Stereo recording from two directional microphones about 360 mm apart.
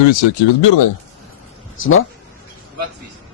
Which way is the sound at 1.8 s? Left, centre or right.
Left.